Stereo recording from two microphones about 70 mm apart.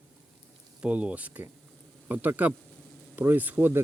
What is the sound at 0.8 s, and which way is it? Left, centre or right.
Speech, centre.